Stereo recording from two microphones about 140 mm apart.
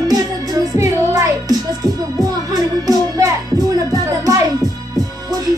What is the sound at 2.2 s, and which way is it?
Music, 25° right (ahead or behind).